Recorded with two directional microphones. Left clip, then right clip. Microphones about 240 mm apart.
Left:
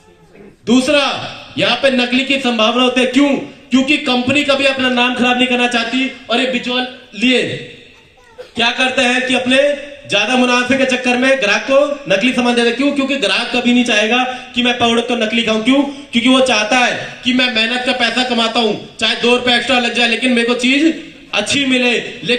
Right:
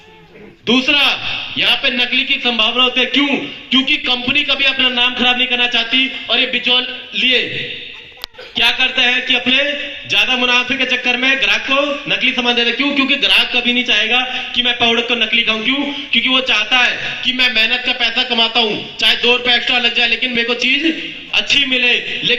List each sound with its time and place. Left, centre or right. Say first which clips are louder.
0.7 s a man's voice: even; left
8.5 s a man's voice: even; left